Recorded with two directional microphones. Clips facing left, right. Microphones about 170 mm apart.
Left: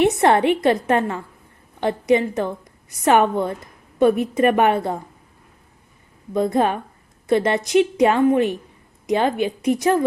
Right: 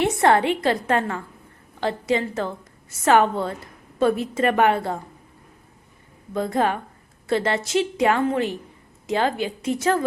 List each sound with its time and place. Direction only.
0.0 s a woman's voice: 20° left (ahead or behind)
6.3 s a woman's voice: 20° left (ahead or behind)